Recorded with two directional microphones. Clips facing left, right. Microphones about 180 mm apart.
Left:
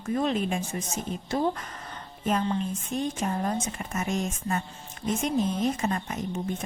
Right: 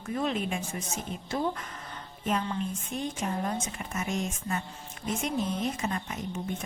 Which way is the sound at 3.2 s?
40° left (ahead or behind).